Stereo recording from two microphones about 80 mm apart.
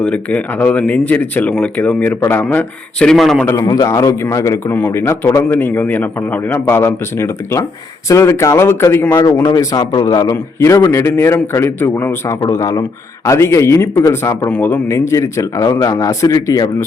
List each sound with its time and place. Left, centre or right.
0.0 s a man's voice: centre
3.0 s speech: centre
3.3 s a man's voice: centre
3.6 s a man's voice: left
5.5 s a man's voice: left
9.1 s a man's voice: left
9.6 s speech: left
10.3 s a man's voice: left
12.5 s a man's voice: left